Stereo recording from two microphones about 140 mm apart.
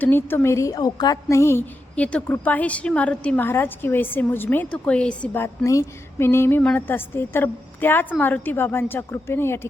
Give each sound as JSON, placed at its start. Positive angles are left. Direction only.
{"t": 0.0, "sound": "a woman's voice", "side_deg": 15}